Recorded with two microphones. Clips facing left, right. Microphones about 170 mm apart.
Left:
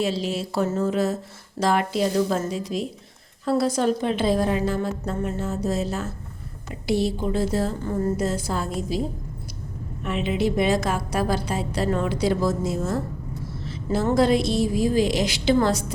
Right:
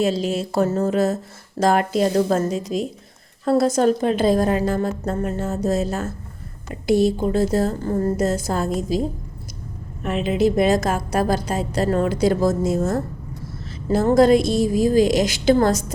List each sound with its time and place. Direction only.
0.0 s speech: 45° right (ahead or behind)
10.2 s speech: 40° right (ahead or behind)